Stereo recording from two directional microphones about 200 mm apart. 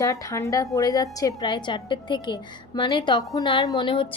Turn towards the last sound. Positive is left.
turn(degrees=25)  # may be behind; listen again after turning